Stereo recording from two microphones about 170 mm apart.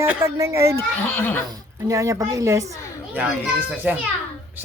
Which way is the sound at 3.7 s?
5° right (ahead or behind).